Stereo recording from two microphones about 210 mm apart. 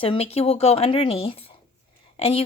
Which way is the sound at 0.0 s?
25° left (ahead or behind).